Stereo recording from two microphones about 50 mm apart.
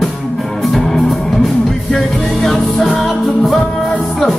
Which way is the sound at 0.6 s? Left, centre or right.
Centre.